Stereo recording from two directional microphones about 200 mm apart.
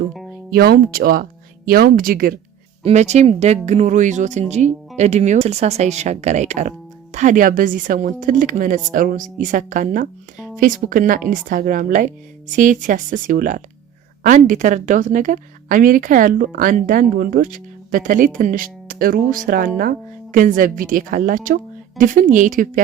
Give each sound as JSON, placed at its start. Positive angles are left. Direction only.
{"t": 0.5, "sound": "speech", "side_deg": -50}
{"t": 2.8, "sound": "a woman's voice", "side_deg": -35}